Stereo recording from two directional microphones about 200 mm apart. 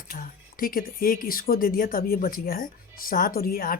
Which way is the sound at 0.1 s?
45° left (ahead or behind).